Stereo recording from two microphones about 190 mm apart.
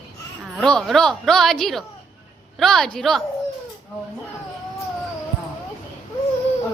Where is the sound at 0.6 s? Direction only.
Centre (ahead or behind).